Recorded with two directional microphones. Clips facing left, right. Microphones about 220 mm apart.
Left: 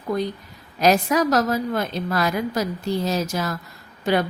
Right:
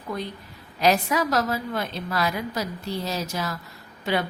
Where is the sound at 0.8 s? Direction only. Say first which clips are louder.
Left 4 dB; 45° left (ahead or behind).